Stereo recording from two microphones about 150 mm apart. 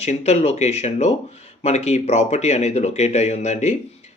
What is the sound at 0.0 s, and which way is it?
Speech, 45° left (ahead or behind).